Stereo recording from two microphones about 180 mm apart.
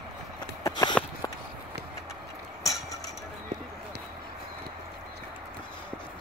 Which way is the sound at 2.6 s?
15° left (ahead or behind).